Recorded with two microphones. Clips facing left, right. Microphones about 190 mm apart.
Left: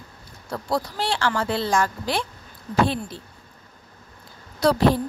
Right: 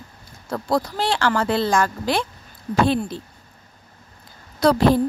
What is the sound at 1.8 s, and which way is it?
Speech, 90° right.